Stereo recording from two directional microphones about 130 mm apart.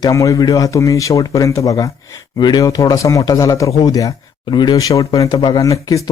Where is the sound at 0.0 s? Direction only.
25° left (ahead or behind).